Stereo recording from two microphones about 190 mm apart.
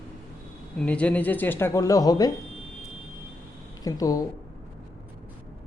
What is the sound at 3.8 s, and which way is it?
Speech, 20° left (ahead or behind).